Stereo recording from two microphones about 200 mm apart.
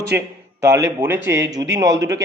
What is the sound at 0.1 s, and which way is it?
A man's voice, 10° right (ahead or behind).